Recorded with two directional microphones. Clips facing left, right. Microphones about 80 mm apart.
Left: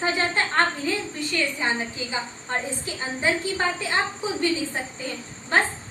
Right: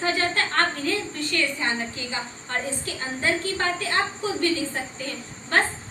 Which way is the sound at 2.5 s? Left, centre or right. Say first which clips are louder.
Even; centre.